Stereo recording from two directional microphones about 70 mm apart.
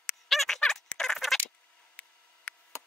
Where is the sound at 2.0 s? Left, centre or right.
Left.